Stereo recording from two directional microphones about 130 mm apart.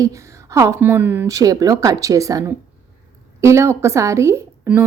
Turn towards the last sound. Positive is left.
turn(degrees=-20)  # may be behind; listen again after turning